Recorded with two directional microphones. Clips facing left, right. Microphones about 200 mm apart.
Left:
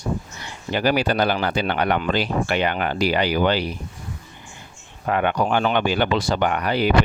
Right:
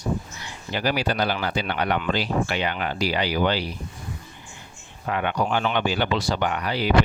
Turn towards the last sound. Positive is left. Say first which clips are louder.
# left 4 dB
turn(degrees=55)  # may be behind; listen again after turning